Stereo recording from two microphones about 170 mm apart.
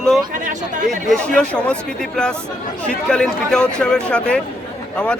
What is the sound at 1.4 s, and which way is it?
A man's voice, 5° left (ahead or behind).